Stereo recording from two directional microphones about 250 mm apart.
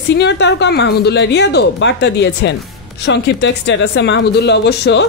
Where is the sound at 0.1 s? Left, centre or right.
Left.